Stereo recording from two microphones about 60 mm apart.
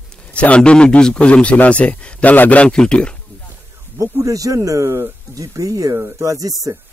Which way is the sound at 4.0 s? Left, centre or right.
Right.